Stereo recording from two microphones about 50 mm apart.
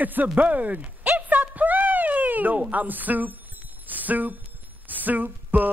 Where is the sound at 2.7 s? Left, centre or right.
Right.